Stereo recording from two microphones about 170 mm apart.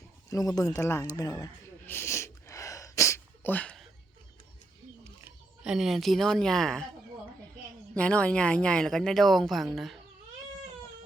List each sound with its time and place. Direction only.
0.3 s speech: 20° left (ahead or behind)
1.9 s sneeze: 15° left (ahead or behind)
5.2 s speech: 5° right (ahead or behind)
7.9 s speech: 5° left (ahead or behind)